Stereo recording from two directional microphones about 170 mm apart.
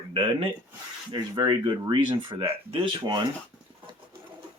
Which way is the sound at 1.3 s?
25° right (ahead or behind).